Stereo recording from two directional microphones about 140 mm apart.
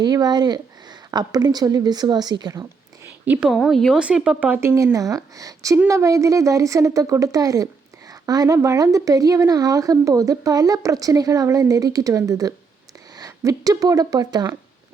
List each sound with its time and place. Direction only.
0.0 s speech: 30° right (ahead or behind)
3.0 s a sound: 15° right (ahead or behind)
3.4 s speech: centre (ahead or behind); by 14.5 s 30° right (ahead or behind)